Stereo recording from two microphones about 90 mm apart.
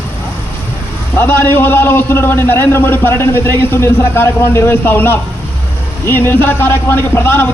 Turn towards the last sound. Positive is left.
turn(degrees=25)  # may be behind; listen again after turning